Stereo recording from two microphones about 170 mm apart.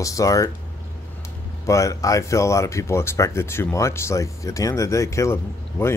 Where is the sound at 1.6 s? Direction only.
20° left (ahead or behind).